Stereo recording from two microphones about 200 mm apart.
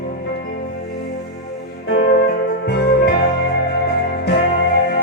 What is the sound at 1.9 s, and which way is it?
Music, 55° left (ahead or behind).